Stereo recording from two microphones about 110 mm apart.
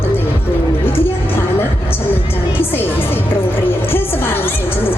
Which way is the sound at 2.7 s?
20° left (ahead or behind).